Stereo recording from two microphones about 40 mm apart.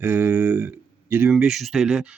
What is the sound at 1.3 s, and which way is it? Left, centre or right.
Speech, centre.